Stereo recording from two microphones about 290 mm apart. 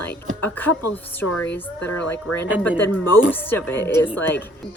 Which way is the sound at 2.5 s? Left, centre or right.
Centre.